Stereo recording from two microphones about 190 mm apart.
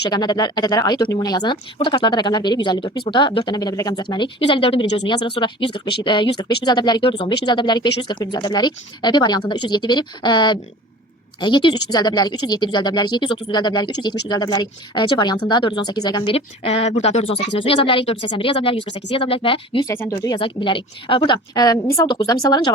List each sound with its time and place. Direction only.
0.1 s speech: 20° left (ahead or behind)
19.9 s speech: 15° left (ahead or behind)